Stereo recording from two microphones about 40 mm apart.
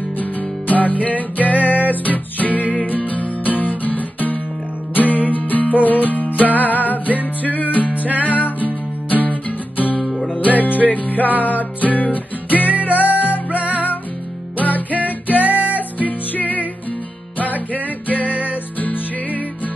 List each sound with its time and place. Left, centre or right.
0.2 s music: left
7.9 s music: right
8.2 s music: left